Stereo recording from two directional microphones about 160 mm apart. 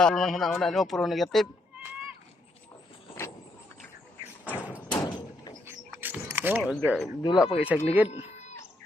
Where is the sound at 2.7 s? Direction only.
15° left (ahead or behind).